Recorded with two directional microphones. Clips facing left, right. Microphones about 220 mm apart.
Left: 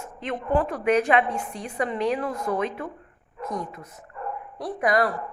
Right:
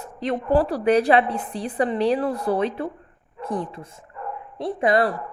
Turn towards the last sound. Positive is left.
turn(degrees=-25)  # may be behind; listen again after turning